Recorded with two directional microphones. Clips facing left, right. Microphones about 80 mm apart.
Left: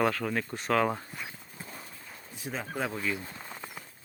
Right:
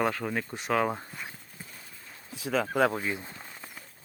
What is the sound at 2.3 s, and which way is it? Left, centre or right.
Speech, right.